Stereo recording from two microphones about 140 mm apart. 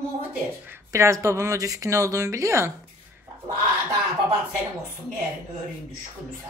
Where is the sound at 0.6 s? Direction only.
20° right (ahead or behind).